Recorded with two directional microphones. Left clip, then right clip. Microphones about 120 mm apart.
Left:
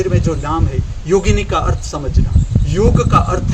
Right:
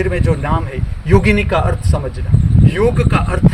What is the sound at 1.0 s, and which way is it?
Speech, 25° left (ahead or behind).